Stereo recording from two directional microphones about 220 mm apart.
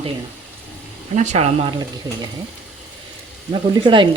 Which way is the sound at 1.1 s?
35° right (ahead or behind).